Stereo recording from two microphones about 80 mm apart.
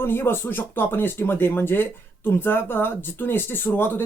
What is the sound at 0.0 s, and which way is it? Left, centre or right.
Speech, left.